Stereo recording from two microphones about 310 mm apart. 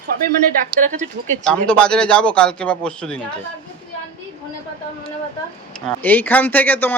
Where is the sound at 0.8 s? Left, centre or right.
Right.